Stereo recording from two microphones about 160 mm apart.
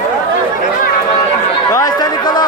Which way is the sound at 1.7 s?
25° left (ahead or behind).